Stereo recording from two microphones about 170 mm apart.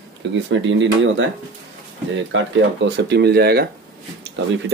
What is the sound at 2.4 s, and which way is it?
Speech, 90° right.